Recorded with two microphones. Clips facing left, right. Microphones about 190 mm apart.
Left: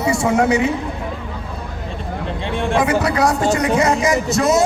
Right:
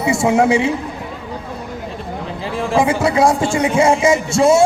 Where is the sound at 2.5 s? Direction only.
Centre (ahead or behind).